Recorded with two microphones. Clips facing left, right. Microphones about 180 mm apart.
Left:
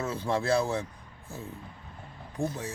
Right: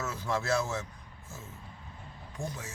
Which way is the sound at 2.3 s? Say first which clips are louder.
Left 7 dB; 35° left (ahead or behind).